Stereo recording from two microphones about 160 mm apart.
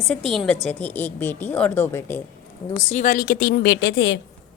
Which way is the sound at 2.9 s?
55° left (ahead or behind).